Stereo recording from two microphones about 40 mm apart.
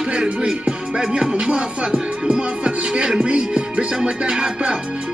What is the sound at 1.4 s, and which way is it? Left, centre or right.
Speech, centre.